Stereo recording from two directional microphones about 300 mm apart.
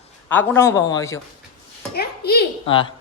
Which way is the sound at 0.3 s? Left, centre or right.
Centre.